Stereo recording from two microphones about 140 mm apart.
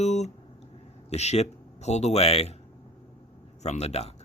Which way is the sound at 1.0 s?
50° left (ahead or behind).